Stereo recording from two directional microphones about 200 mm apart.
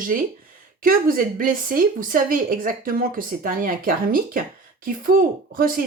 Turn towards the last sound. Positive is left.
turn(degrees=-45)  # may be behind; listen again after turning